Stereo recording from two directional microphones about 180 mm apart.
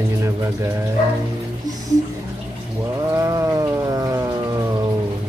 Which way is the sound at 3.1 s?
15° right (ahead or behind).